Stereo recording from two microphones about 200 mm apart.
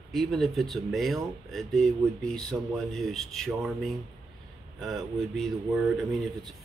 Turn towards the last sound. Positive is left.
turn(degrees=0)  # may be behind; listen again after turning